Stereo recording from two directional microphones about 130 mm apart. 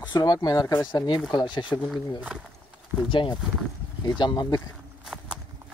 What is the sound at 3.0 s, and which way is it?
Speech, 40° left (ahead or behind).